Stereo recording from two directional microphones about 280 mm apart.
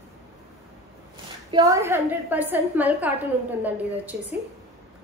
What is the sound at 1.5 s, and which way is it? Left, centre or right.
A woman's voice, centre.